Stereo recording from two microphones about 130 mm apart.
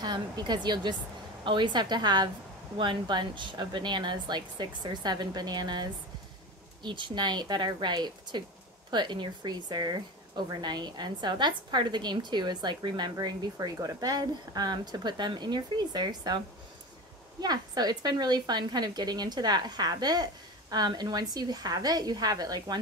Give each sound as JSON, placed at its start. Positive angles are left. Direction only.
{"t": 0.0, "sound": "speech", "side_deg": -35}
{"t": 17.4, "sound": "speech", "side_deg": -30}